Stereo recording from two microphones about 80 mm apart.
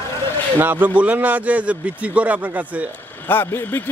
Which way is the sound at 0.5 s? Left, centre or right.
Right.